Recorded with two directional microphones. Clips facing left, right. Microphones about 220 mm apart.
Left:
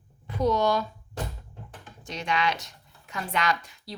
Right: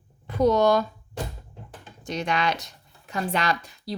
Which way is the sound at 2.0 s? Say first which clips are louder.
Right 2 dB; 45° right (ahead or behind).